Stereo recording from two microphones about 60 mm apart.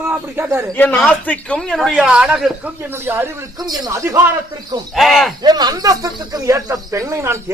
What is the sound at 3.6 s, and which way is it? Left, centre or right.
Speech, right.